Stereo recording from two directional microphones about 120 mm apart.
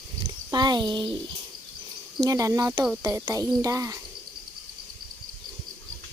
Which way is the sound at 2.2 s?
30° right (ahead or behind).